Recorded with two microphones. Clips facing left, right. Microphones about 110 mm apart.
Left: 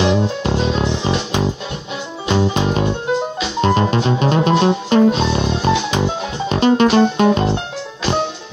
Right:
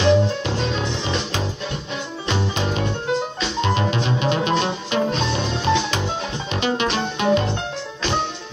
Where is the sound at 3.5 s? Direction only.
40° left (ahead or behind).